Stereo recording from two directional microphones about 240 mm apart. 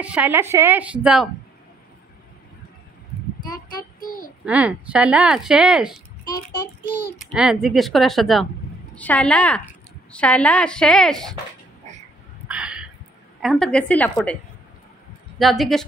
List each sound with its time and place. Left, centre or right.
0.0 s a woman's voice: centre
3.5 s child singing: left
4.5 s speech: centre
7.3 s speech: centre
12.4 s a sound: centre
13.4 s speech: centre